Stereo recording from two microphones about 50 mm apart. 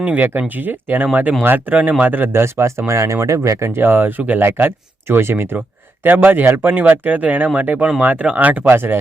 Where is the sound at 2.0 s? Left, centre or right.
Right.